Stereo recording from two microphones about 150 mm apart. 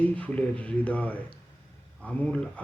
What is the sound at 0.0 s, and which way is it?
Speech, 10° left (ahead or behind).